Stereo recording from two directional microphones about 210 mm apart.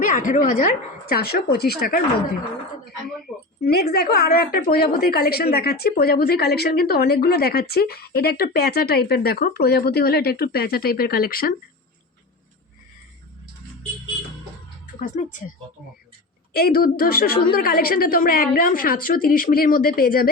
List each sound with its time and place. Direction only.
0.0 s a woman's voice: 40° left (ahead or behind)
3.6 s a woman's voice: 50° left (ahead or behind)
14.8 s speech: 40° left (ahead or behind)
16.5 s a woman's voice: 45° left (ahead or behind)